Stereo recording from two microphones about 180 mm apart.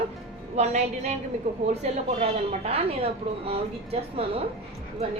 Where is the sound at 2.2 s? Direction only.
35° right (ahead or behind).